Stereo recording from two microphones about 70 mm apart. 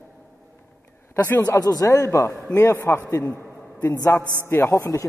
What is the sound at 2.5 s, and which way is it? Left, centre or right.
A man's voice, left.